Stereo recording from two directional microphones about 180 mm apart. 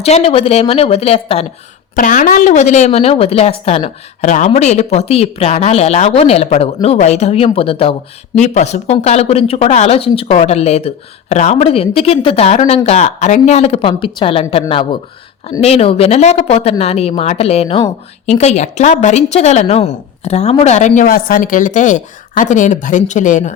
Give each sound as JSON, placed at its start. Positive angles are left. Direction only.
{"t": 0.0, "sound": "speech", "side_deg": 35}
{"t": 2.0, "sound": "speech", "side_deg": 45}